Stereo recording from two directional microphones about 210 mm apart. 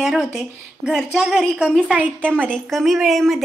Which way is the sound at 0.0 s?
5° right (ahead or behind).